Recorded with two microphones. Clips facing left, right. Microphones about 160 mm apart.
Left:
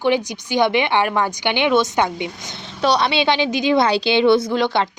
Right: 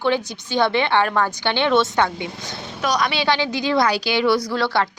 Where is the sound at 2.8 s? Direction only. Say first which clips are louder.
Left 4 dB; 30° left (ahead or behind).